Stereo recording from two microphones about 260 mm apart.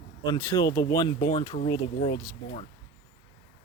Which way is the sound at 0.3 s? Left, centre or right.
Centre.